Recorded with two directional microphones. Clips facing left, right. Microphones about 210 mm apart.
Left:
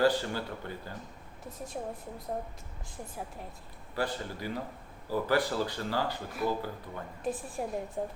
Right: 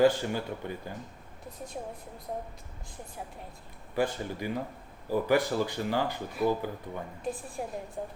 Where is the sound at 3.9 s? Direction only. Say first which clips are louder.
Right 4 dB; 15° right (ahead or behind).